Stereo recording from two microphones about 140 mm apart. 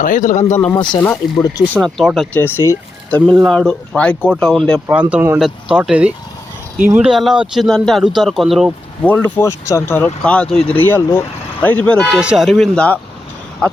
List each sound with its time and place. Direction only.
0.0 s speech: 70° left (ahead or behind)
0.5 s speech: 15° left (ahead or behind)
0.8 s speech: 30° left (ahead or behind)
1.8 s speech: centre (ahead or behind)
2.3 s speech: 15° left (ahead or behind)
3.4 s speech: 5° left (ahead or behind)
4.9 s speech: 10° right (ahead or behind)
9.0 s speech: 15° left (ahead or behind)
12.1 s speech: 5° right (ahead or behind)